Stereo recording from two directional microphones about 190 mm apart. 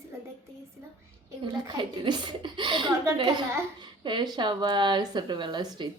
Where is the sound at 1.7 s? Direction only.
25° right (ahead or behind).